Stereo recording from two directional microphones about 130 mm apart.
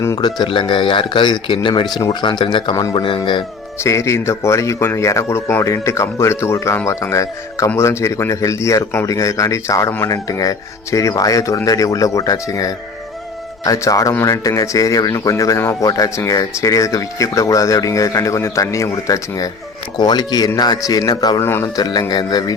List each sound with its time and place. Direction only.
0.2 s speech: 35° left (ahead or behind)
3.8 s speech: 20° left (ahead or behind)
21.4 s speech: 15° left (ahead or behind)
21.8 s speech: 35° left (ahead or behind)